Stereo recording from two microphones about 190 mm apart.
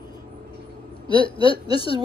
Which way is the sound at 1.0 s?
25° left (ahead or behind).